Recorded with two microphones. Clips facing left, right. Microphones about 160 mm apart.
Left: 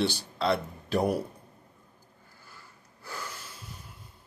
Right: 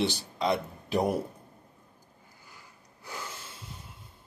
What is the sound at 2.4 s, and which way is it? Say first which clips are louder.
Snort: left 1 dB; 15° right (ahead or behind).